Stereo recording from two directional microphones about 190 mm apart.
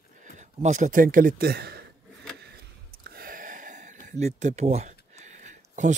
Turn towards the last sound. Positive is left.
turn(degrees=-40)  # may be behind; listen again after turning